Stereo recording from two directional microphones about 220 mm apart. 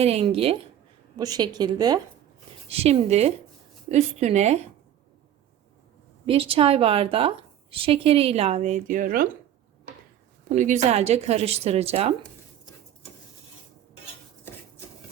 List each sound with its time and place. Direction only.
0.0 s a woman's voice: 30° right (ahead or behind)
2.6 s a woman's voice: 30° right (ahead or behind)
6.2 s a woman's voice: 25° right (ahead or behind)
10.5 s a woman's voice: 35° right (ahead or behind)